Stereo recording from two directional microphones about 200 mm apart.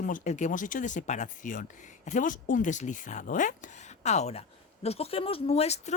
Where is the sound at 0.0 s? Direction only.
40° left (ahead or behind).